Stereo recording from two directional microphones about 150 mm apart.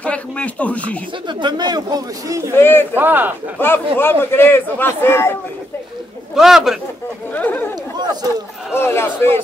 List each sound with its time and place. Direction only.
0.0 s a man's voice: 10° left (ahead or behind)
1.2 s speech: 30° right (ahead or behind)
2.6 s a man's voice: 15° left (ahead or behind)
3.0 s speech: 10° right (ahead or behind)
3.5 s a man's voice: 15° left (ahead or behind)
6.3 s a man's voice: centre (ahead or behind)
7.3 s a man's voice: 10° left (ahead or behind)
8.0 s speech: 25° right (ahead or behind)
8.7 s a man's voice: 15° left (ahead or behind)